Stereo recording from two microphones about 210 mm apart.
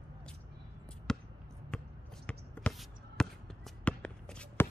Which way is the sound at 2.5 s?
5° left (ahead or behind).